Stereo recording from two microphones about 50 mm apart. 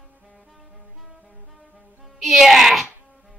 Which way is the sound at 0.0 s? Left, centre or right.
Centre.